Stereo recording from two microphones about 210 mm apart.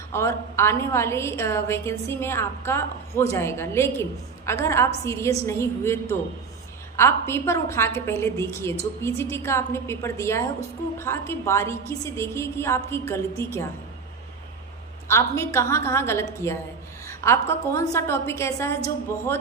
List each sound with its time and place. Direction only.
0.1 s a woman's voice: 15° left (ahead or behind)
15.0 s a woman's voice: 15° left (ahead or behind)